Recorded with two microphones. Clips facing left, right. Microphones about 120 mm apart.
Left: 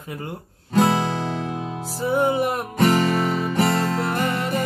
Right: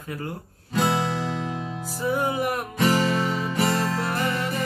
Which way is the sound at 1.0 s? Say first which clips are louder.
Left 2 dB; 65° left (ahead or behind).